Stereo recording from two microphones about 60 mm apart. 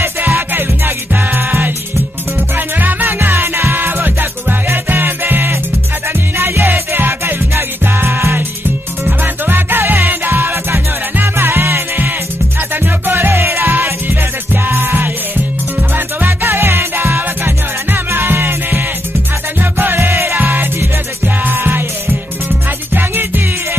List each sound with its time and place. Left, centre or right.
0.3 s music: right
10.5 s music: right
14.8 s music: right
16.2 s music: right
20.3 s music: right
22.9 s music: right